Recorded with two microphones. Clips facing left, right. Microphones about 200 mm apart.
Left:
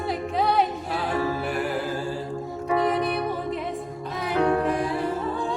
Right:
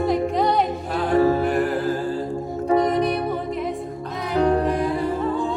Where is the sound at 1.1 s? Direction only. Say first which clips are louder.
Right 10 dB; 45° right (ahead or behind).